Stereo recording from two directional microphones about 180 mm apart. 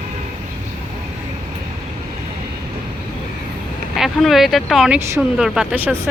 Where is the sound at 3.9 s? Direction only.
Centre (ahead or behind).